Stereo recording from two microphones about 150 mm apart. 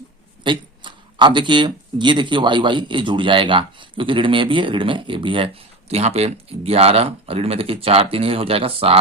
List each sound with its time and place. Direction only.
0.4 s speech: 30° right (ahead or behind)